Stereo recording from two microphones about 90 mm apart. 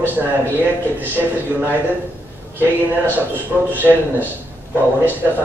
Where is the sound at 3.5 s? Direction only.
15° right (ahead or behind).